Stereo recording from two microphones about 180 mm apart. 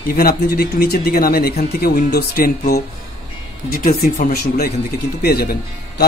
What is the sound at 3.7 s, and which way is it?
Speech, 55° left (ahead or behind).